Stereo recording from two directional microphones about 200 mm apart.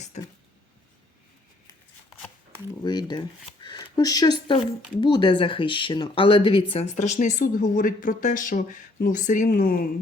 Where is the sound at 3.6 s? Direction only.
20° left (ahead or behind).